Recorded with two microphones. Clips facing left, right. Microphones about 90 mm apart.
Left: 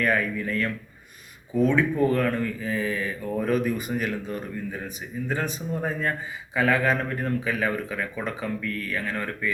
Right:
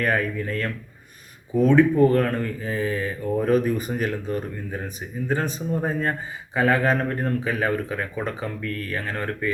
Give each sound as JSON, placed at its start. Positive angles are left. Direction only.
{"t": 0.0, "sound": "a man's voice", "side_deg": -40}